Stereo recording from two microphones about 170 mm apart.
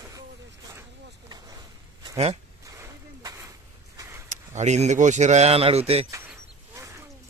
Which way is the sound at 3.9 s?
20° right (ahead or behind).